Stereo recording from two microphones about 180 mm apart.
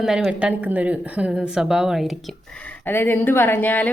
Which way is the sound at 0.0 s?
5° right (ahead or behind).